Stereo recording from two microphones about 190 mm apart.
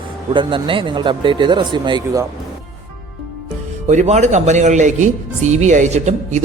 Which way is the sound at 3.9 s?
40° right (ahead or behind).